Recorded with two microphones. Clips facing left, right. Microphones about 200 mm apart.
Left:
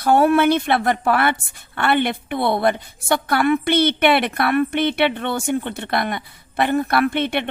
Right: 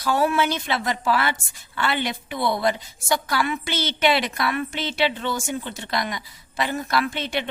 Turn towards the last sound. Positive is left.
turn(degrees=60)  # may be behind; listen again after turning